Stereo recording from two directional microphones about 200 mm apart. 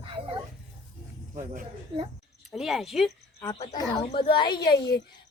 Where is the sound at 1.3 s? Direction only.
40° right (ahead or behind).